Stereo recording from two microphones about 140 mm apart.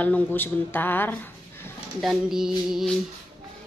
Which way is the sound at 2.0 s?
5° right (ahead or behind).